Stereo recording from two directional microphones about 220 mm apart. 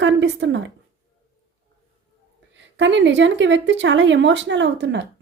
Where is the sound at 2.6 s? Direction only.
55° right (ahead or behind).